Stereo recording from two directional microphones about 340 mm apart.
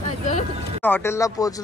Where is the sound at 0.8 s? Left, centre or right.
Centre.